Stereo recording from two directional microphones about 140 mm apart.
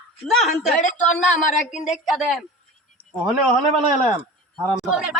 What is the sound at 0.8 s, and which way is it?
Speech, 65° left (ahead or behind).